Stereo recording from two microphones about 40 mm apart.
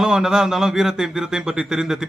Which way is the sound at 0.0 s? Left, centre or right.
Centre.